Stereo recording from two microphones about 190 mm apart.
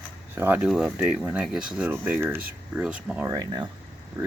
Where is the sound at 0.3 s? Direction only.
10° right (ahead or behind).